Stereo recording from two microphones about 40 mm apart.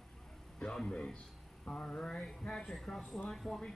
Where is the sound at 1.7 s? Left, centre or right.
Left.